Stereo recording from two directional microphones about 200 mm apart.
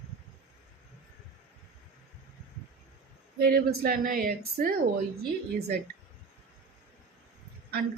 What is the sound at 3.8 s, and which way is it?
Speech, 45° right (ahead or behind).